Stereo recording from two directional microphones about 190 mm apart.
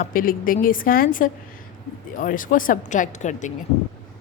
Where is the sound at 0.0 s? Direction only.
45° left (ahead or behind).